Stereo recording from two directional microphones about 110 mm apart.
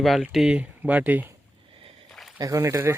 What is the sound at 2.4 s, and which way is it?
Speech, 30° right (ahead or behind).